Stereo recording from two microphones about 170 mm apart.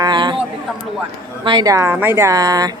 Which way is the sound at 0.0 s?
25° right (ahead or behind).